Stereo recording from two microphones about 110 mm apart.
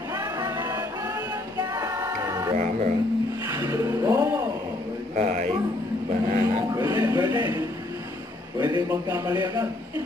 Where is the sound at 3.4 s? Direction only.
30° right (ahead or behind).